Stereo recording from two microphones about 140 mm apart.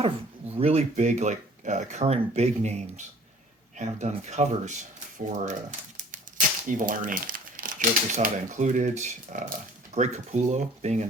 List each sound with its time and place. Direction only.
0.0 s speech: 45° right (ahead or behind)
6.1 s speech: 70° right (ahead or behind)